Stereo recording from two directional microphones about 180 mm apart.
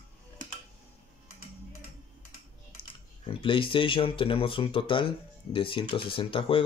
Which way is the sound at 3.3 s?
30° left (ahead or behind).